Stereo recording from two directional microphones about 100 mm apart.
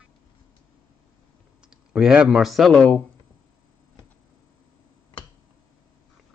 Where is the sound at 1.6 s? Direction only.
10° right (ahead or behind).